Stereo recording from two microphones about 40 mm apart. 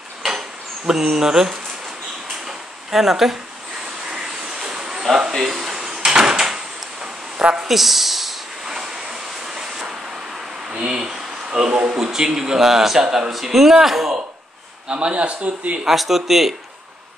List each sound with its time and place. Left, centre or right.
0.2 s dishes: centre
2.4 s a sound: centre
4.3 s vehicle: centre
5.3 s a man's voice: centre
5.6 s door: centre
7.6 s speech: centre
8.6 s waves: centre
10.7 s a sound: right
11.9 s a man's voice: centre
14.9 s a man's voice: right
15.9 s speech: centre